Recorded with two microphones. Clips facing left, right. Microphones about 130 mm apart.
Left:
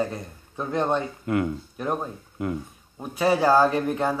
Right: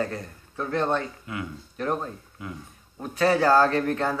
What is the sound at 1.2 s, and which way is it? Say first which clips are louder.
Speech: left 10 dB; 50° left (ahead or behind).